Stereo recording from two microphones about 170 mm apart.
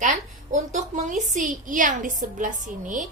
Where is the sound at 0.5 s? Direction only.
45° right (ahead or behind).